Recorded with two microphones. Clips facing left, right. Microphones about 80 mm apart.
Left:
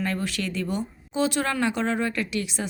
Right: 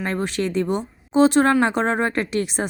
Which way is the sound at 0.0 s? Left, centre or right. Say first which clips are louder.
Right 4 dB; right.